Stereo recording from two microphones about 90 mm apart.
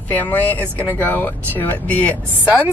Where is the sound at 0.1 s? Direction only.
20° left (ahead or behind).